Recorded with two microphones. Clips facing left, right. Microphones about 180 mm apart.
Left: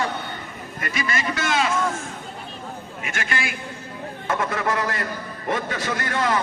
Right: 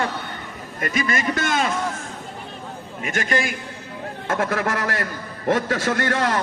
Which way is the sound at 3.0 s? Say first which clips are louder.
Right 6 dB; 40° right (ahead or behind).